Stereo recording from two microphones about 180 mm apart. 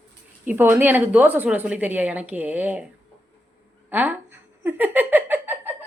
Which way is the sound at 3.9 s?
10° right (ahead or behind).